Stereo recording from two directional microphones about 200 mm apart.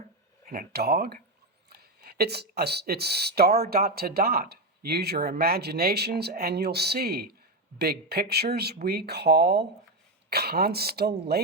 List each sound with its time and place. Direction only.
0.4 s speech: 45° right (ahead or behind)